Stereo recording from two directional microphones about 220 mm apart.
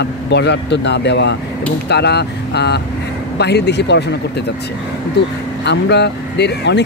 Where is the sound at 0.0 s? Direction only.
50° left (ahead or behind).